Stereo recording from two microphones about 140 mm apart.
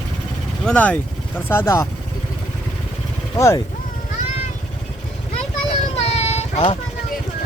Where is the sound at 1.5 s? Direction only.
20° left (ahead or behind).